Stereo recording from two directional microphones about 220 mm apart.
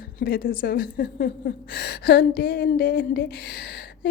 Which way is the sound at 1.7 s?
50° left (ahead or behind).